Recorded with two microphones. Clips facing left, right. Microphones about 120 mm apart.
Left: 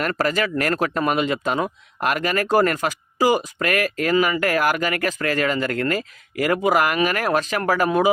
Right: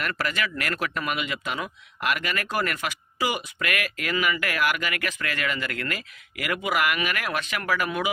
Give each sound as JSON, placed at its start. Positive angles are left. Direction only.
{"t": 0.0, "sound": "speech", "side_deg": 40}